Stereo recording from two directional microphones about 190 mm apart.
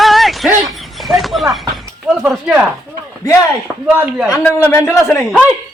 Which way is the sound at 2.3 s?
5° right (ahead or behind).